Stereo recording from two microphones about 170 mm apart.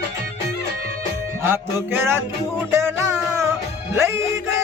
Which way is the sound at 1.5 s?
15° right (ahead or behind).